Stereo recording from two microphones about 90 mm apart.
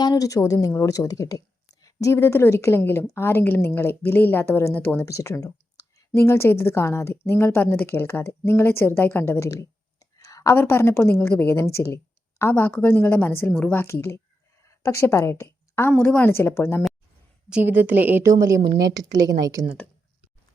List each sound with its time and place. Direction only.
0.0 s a woman's voice: 45° left (ahead or behind); by 5.0 s 20° left (ahead or behind)
5.0 s a woman's voice: 35° left (ahead or behind)
10.5 s a woman's voice: 25° left (ahead or behind)
13.8 s a woman's voice: 30° left (ahead or behind)
14.6 s a sound: 35° left (ahead or behind)
15.9 s a woman's voice: 15° left (ahead or behind)
17.5 s a woman's voice: 20° right (ahead or behind)
18.3 s a woman's voice: 35° right (ahead or behind)